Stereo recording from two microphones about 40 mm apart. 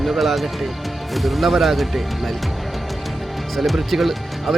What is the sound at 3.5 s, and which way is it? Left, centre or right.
Speech, centre.